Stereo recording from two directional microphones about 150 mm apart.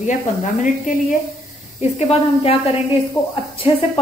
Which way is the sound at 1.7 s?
45° left (ahead or behind).